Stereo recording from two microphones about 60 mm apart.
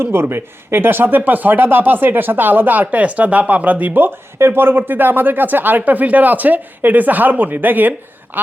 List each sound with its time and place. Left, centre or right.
0.0 s speech: right